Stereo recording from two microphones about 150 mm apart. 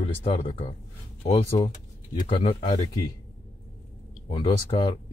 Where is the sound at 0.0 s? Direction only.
40° left (ahead or behind).